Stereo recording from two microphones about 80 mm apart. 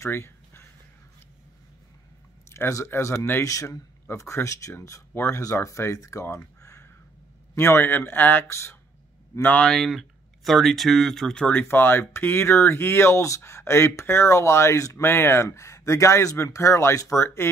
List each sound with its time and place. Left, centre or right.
0.0 s a sound: left
2.5 s a man's voice: left
6.3 s a sound: left
7.5 s speech: left
9.6 s speech: centre
11.4 s speech: left